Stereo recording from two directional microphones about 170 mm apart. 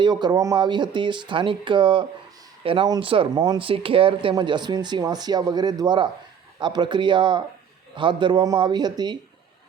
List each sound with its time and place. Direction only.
0.0 s speech: 25° right (ahead or behind)